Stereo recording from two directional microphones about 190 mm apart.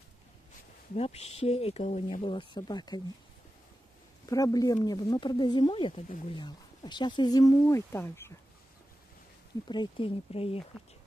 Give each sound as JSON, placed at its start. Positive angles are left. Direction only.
{"t": 0.9, "sound": "speech", "side_deg": 35}
{"t": 4.3, "sound": "speech", "side_deg": 20}
{"t": 9.7, "sound": "speech", "side_deg": 25}